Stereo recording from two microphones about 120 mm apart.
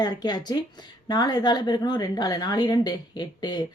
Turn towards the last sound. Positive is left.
turn(degrees=40)  # may be behind; listen again after turning